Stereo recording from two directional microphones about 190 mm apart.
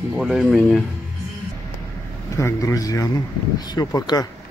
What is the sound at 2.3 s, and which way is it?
Speech, 15° left (ahead or behind).